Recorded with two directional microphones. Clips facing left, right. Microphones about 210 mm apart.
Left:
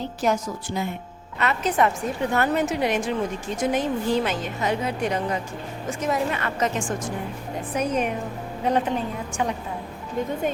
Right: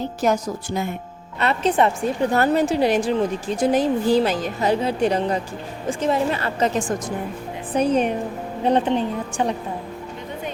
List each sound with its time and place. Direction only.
0.2 s a woman's voice: 45° right (ahead or behind)
1.4 s a woman's voice: 30° right (ahead or behind)